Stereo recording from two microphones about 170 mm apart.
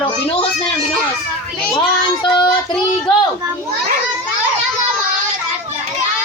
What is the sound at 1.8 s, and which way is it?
Child singing, 25° left (ahead or behind).